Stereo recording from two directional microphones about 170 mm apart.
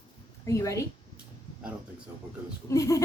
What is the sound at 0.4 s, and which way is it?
Speech, 20° left (ahead or behind).